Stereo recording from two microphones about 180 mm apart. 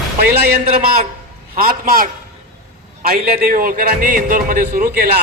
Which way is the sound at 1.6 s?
55° right (ahead or behind).